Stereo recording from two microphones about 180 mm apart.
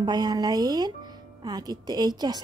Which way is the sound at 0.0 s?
25° right (ahead or behind).